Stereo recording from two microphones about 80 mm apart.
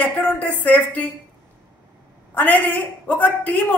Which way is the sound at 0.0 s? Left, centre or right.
Centre.